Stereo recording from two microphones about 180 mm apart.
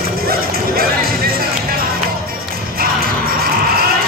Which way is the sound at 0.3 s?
55° right (ahead or behind).